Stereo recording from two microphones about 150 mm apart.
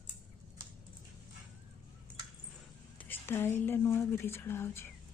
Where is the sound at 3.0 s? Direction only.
15° left (ahead or behind).